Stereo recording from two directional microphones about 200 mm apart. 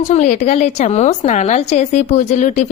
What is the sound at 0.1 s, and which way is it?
A woman's voice, 35° left (ahead or behind).